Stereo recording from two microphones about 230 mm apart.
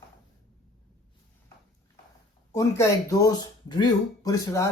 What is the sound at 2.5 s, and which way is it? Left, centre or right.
Speech, centre.